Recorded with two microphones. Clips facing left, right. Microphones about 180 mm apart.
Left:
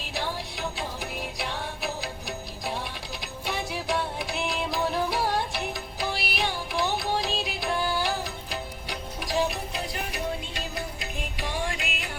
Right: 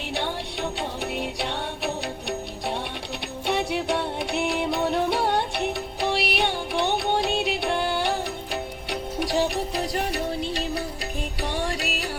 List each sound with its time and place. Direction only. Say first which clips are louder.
0.5 s music: right 4 dB; 65° right (ahead or behind)
3.4 s music: right 6 dB; 65° right (ahead or behind)
4.8 s music: right 2 dB; 25° right (ahead or behind)
5.3 s music: right 4 dB; 65° right (ahead or behind)
7.8 s music: right 3 dB; 25° right (ahead or behind)
8.2 s music: right 5 dB; 65° right (ahead or behind)
9.3 s music: right 2 dB; 35° right (ahead or behind)